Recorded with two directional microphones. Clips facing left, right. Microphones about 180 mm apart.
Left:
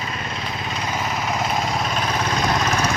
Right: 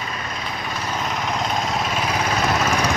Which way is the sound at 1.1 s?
5° left (ahead or behind).